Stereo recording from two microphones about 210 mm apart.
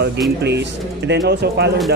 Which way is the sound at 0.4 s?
55° right (ahead or behind).